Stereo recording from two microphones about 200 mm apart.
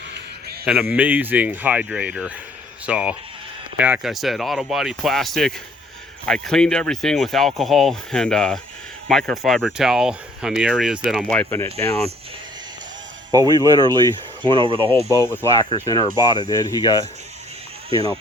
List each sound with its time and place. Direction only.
0.6 s speech: 5° right (ahead or behind); by 11.9 s 15° left (ahead or behind)
13.3 s speech: 20° right (ahead or behind)
16.1 s speech: 20° left (ahead or behind)